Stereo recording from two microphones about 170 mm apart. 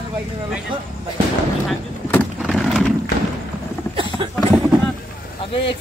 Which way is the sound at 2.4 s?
Centre (ahead or behind).